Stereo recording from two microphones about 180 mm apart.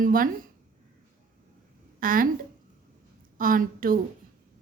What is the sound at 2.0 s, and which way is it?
Speech, 50° right (ahead or behind).